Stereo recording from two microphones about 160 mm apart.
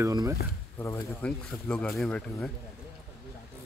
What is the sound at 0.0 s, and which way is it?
Speech, 20° right (ahead or behind).